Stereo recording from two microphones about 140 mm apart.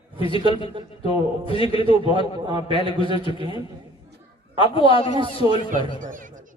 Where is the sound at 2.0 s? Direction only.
35° right (ahead or behind).